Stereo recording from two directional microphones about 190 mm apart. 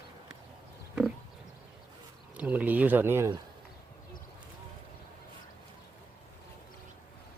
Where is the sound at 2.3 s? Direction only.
10° right (ahead or behind).